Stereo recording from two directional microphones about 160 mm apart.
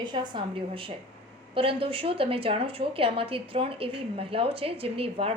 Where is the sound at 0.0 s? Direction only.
30° right (ahead or behind).